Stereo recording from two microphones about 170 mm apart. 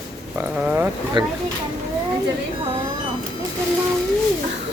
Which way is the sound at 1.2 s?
25° right (ahead or behind).